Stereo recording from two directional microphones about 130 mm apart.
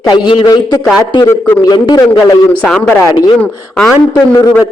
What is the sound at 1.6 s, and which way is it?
Speech, 35° left (ahead or behind).